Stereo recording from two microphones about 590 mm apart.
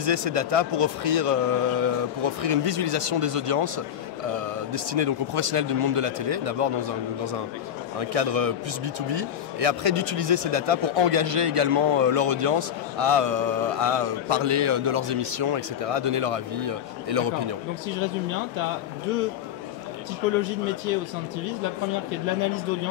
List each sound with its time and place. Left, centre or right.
0.0 s speech: right
8.0 s speech: right